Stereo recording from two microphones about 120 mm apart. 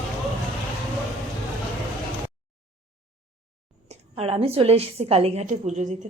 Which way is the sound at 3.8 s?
55° right (ahead or behind).